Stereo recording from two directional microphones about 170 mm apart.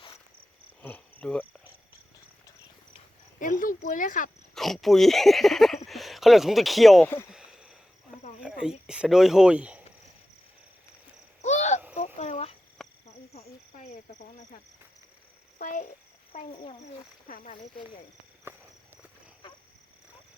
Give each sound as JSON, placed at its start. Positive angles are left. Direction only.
{"t": 0.8, "sound": "cricket", "side_deg": 10}
{"t": 3.4, "sound": "speech", "side_deg": 50}
{"t": 4.5, "sound": "speech", "side_deg": 0}
{"t": 7.3, "sound": "a sound", "side_deg": -5}
{"t": 8.4, "sound": "speech", "side_deg": -5}
{"t": 11.4, "sound": "a sound", "side_deg": 40}
{"t": 12.8, "sound": "a sound", "side_deg": 0}
{"t": 13.7, "sound": "a child's voice", "side_deg": 45}
{"t": 17.2, "sound": "speech", "side_deg": 50}